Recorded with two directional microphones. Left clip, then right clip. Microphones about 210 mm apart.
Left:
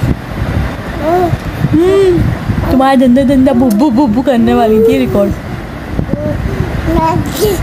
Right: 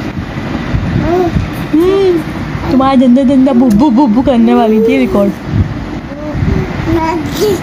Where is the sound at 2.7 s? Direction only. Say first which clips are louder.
Even; 10° left (ahead or behind).